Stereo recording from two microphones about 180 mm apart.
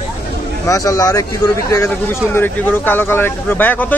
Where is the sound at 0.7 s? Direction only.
20° left (ahead or behind).